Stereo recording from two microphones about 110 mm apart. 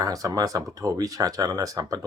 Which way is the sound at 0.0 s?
30° right (ahead or behind).